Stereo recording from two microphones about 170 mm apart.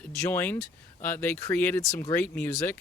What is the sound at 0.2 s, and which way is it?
Speech, 10° left (ahead or behind).